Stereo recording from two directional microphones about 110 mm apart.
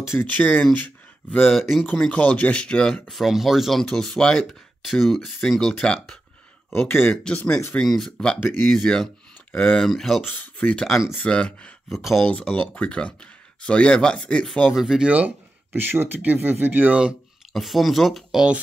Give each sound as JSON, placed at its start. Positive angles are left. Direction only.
{"t": 0.1, "sound": "speech", "side_deg": 20}
{"t": 1.5, "sound": "speech", "side_deg": 0}
{"t": 2.0, "sound": "speech", "side_deg": 10}
{"t": 6.7, "sound": "speech", "side_deg": 20}
{"t": 10.3, "sound": "speech", "side_deg": 15}
{"t": 10.9, "sound": "speech", "side_deg": -5}
{"t": 11.1, "sound": "speech", "side_deg": 10}
{"t": 11.9, "sound": "speech", "side_deg": 0}
{"t": 14.7, "sound": "speech", "side_deg": -5}